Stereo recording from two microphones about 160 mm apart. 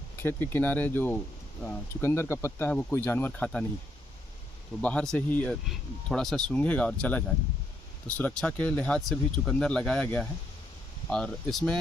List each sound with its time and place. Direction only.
0.2 s speech: 15° left (ahead or behind)
4.8 s speech: 10° left (ahead or behind)